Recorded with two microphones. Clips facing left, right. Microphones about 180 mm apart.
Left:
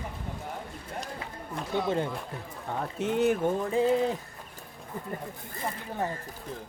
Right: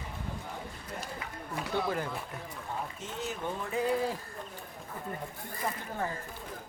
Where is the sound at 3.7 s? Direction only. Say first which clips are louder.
Left 3 dB; 25° left (ahead or behind).